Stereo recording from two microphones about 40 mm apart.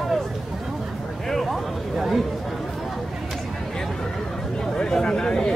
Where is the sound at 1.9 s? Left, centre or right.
Centre.